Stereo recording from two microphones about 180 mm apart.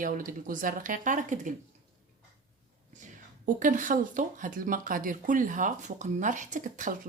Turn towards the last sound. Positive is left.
turn(degrees=-45)  # may be behind; listen again after turning